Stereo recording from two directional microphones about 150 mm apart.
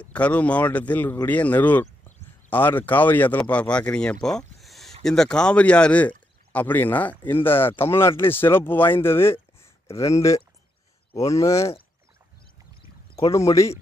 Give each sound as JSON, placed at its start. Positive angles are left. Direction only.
{"t": 0.0, "sound": "speech", "side_deg": 10}
{"t": 13.3, "sound": "speech", "side_deg": 20}